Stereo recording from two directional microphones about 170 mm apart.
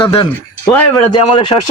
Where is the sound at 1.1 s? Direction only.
30° left (ahead or behind).